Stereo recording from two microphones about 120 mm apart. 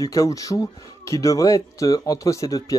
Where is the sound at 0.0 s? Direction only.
30° left (ahead or behind).